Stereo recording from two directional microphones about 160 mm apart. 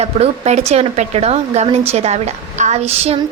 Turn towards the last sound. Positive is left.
turn(degrees=-40)  # may be behind; listen again after turning